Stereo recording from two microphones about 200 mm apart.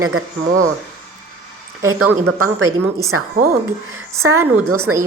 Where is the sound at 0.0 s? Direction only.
90° right.